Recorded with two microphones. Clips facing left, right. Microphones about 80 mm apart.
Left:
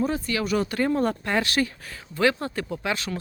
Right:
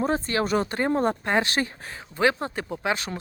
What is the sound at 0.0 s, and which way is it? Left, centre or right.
Speech, right.